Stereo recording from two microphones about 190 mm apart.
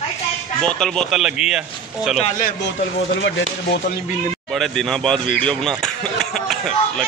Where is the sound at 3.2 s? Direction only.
70° left (ahead or behind).